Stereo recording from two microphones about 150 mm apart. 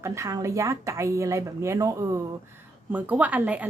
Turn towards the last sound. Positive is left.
turn(degrees=-10)  # may be behind; listen again after turning